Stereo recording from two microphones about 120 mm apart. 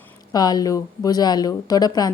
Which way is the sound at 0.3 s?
35° left (ahead or behind).